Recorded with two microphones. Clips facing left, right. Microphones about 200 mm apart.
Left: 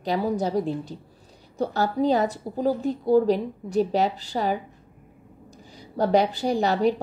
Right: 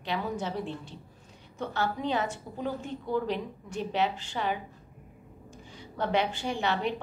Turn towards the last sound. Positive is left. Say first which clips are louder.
# left 8 dB
turn(degrees=40)  # may be behind; listen again after turning